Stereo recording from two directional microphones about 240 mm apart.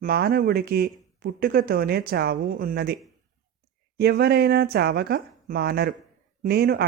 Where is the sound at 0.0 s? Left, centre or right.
Right.